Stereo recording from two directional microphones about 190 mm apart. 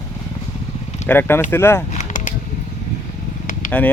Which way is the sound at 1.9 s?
40° left (ahead or behind).